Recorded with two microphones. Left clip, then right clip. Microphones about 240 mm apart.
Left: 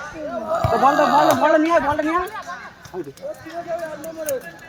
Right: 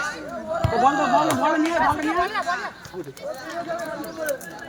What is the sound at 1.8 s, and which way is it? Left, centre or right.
Speech, right.